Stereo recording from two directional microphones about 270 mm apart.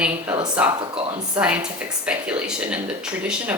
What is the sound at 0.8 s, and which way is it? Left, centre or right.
Speech, right.